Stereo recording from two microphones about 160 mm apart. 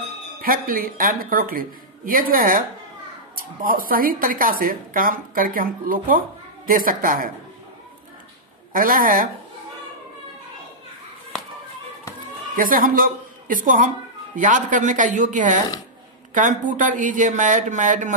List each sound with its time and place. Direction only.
0.4 s speech: 65° right (ahead or behind)
8.7 s speech: 60° right (ahead or behind)
12.5 s a woman's voice: 60° right (ahead or behind)